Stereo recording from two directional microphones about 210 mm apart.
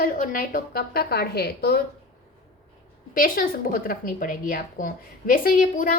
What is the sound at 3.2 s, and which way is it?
A woman's voice, 40° left (ahead or behind).